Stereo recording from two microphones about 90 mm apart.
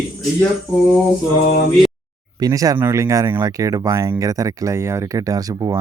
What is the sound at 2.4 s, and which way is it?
Speech, 40° right (ahead or behind).